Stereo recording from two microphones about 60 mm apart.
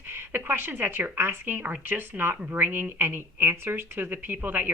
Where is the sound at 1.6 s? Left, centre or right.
Right.